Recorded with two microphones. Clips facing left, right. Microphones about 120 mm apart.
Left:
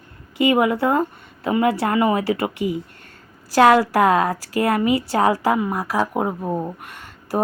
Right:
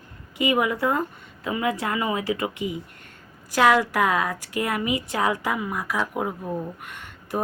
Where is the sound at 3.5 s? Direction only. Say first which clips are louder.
Left 5 dB; 35° left (ahead or behind).